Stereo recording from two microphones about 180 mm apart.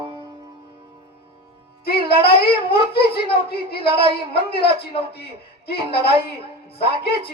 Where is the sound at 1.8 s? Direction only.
60° left (ahead or behind).